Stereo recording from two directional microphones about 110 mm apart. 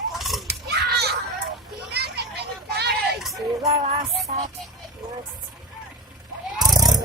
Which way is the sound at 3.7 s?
70° right (ahead or behind).